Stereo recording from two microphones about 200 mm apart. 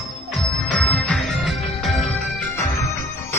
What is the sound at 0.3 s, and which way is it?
Music, 5° left (ahead or behind).